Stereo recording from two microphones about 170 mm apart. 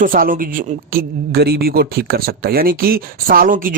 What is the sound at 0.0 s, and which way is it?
Speech, 55° right (ahead or behind).